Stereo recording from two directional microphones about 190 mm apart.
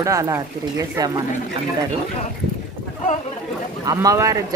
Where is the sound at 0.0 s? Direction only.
15° right (ahead or behind).